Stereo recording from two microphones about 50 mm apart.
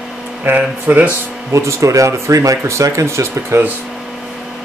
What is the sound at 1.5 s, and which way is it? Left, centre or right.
Speech, right.